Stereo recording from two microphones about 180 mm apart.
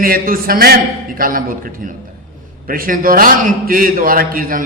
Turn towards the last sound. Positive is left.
turn(degrees=-50)  # may be behind; listen again after turning